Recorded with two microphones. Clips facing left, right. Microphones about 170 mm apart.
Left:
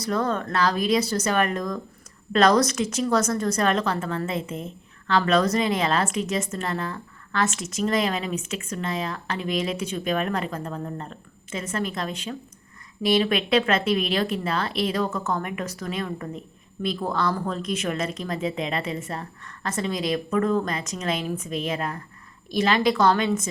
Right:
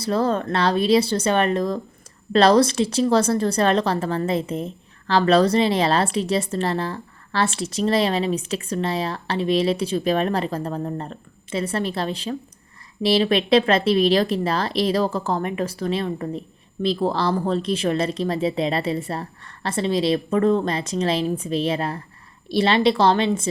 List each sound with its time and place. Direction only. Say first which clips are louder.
0.0 s speech: right 4 dB; 30° right (ahead or behind)